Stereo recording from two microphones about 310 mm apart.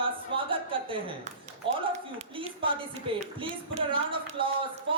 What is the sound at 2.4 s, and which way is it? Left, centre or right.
Speech, centre.